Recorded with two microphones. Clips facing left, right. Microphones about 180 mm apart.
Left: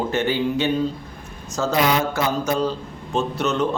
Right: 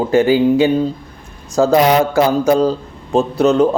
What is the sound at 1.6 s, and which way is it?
Speech, 40° right (ahead or behind).